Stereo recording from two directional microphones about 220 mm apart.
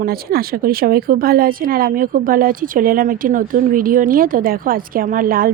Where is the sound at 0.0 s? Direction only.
45° right (ahead or behind).